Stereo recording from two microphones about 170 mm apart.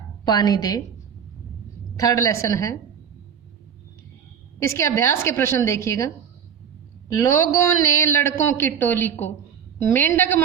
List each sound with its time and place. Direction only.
0.3 s a woman's voice: 25° left (ahead or behind)
2.0 s a man's voice: 20° left (ahead or behind)
4.6 s a man's voice: 15° left (ahead or behind)
7.2 s a man's voice: 15° left (ahead or behind)